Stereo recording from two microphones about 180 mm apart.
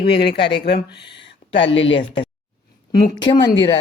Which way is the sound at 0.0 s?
65° left (ahead or behind).